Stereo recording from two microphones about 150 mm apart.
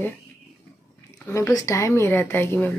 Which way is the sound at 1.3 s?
20° left (ahead or behind).